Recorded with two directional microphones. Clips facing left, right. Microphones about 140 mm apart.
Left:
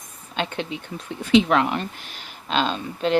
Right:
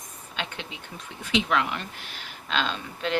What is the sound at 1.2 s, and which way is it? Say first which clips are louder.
Speech: left 8 dB; 40° left (ahead or behind).